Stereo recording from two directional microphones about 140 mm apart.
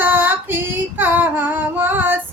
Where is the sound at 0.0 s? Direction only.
15° right (ahead or behind).